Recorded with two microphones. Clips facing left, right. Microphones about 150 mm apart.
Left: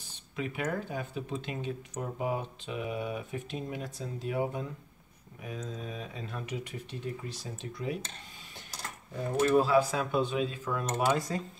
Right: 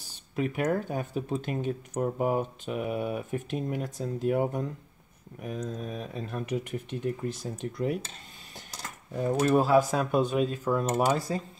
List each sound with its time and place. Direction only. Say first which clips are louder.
0.0 s speech: right 6 dB; 45° right (ahead or behind)
9.4 s speech: right 2 dB; 45° right (ahead or behind)